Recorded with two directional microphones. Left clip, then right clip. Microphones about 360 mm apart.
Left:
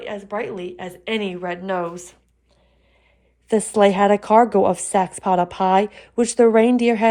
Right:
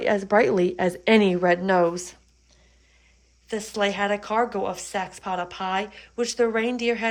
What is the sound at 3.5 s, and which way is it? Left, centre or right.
A woman's voice, centre.